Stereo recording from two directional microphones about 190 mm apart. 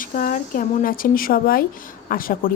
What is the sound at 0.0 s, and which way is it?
A woman's voice, 45° left (ahead or behind).